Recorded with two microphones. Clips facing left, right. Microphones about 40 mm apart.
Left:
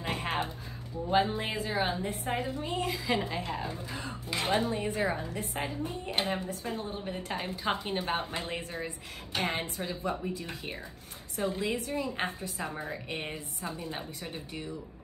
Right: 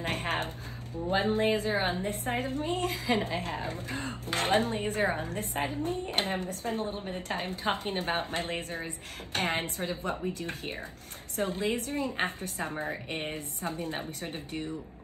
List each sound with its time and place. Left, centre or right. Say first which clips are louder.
0.0 s a sound: right 1 dB; right
1.2 s a woman's voice: right 6 dB; right
12.8 s speech: right 2 dB; right
13.3 s a woman's voice: right 3 dB; right